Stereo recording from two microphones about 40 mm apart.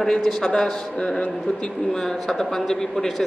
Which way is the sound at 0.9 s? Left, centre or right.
Left.